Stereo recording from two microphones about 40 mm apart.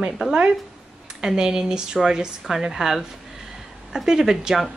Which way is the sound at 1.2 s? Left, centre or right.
Centre.